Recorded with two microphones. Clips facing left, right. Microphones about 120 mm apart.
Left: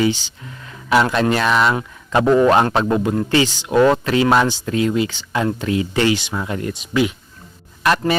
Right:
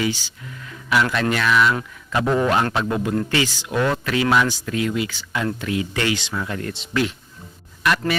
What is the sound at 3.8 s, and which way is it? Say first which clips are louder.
Speech: left 7 dB; 30° left (ahead or behind).